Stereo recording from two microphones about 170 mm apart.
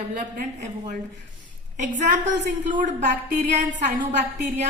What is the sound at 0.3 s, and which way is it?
Speech, 55° right (ahead or behind).